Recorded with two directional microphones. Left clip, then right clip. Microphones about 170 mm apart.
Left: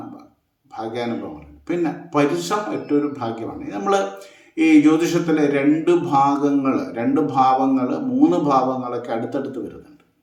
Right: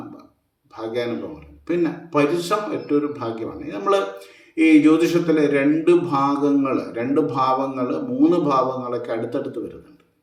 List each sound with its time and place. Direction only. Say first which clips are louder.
0.7 s a man's voice: even; 15° left (ahead or behind)